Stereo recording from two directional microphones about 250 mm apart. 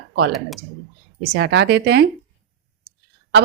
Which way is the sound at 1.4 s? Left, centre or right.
Right.